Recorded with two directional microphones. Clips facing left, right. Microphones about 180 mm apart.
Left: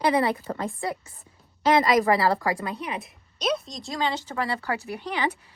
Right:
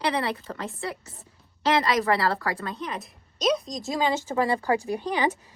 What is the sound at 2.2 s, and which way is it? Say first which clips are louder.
A woman's voice: left 3 dB; 15° left (ahead or behind).